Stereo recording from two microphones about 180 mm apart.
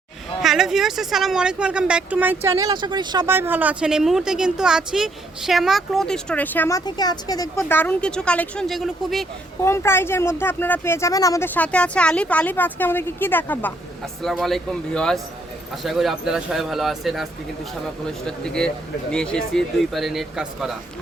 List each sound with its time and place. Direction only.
0.4 s speech: centre (ahead or behind); by 3.2 s 25° right (ahead or behind)
3.2 s speech: 10° right (ahead or behind)
9.6 s speech: 15° left (ahead or behind); by 20.7 s 5° right (ahead or behind)